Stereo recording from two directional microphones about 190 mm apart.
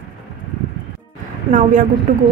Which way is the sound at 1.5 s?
40° right (ahead or behind).